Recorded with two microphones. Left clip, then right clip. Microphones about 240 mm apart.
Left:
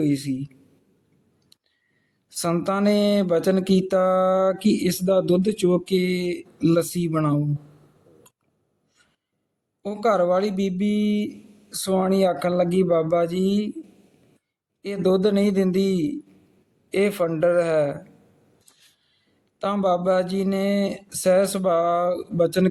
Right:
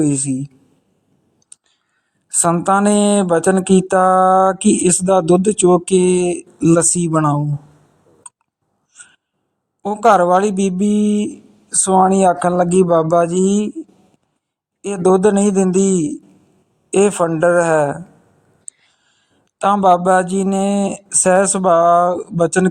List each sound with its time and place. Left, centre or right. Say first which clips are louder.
0.0 s speech: right 6 dB; right
2.4 s speech: right 9 dB; right
9.8 s speech: right 9 dB; right
14.8 s speech: right 8 dB; right
19.5 s speech: right 10 dB; right